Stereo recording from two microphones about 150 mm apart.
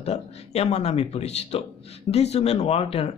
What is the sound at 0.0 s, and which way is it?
Speech, 45° left (ahead or behind).